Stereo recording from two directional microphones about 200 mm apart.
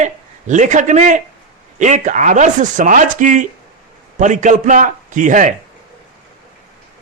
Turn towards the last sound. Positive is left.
turn(degrees=-40)  # may be behind; listen again after turning